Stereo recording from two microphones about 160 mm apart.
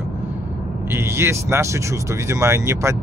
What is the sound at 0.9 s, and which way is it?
Speech, 15° right (ahead or behind).